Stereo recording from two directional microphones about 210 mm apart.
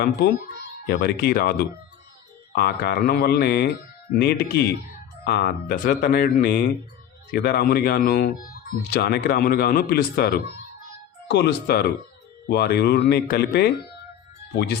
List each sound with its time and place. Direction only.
0.0 s speech: 50° left (ahead or behind)
2.6 s speech: 50° left (ahead or behind)